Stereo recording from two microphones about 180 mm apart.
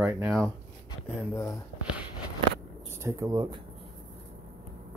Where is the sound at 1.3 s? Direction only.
15° left (ahead or behind).